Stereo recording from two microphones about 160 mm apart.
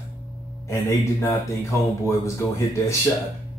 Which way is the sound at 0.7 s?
20° left (ahead or behind).